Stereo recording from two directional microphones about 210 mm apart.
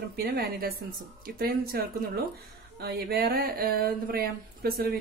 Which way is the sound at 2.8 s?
50° right (ahead or behind).